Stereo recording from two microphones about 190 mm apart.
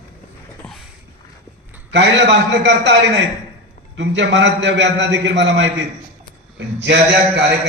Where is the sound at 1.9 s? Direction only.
70° right (ahead or behind).